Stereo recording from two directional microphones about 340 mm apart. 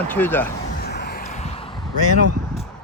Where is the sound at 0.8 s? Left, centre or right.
Left.